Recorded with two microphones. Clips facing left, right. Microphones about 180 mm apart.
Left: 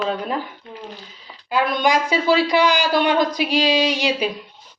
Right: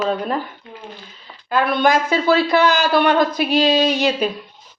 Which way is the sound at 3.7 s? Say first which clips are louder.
Right 3 dB; 50° right (ahead or behind).